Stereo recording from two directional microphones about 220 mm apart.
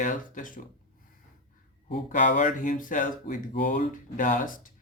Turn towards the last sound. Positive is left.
turn(degrees=35)  # may be behind; listen again after turning